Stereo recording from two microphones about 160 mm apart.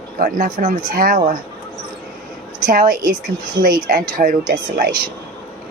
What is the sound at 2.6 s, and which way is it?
A woman's voice, 60° right (ahead or behind).